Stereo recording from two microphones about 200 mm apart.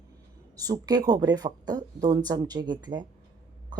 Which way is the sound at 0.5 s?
20° right (ahead or behind).